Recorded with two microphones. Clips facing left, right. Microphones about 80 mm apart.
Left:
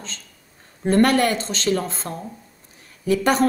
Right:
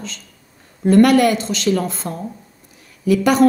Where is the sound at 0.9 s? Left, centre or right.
Left.